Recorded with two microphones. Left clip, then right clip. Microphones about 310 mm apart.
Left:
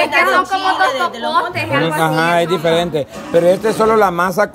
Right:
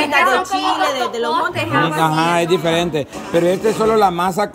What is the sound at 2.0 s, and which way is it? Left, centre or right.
A man's voice, centre.